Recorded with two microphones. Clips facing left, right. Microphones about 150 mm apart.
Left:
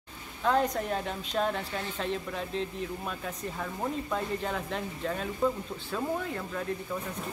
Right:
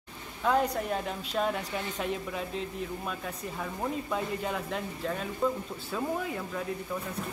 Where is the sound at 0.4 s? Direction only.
5° right (ahead or behind).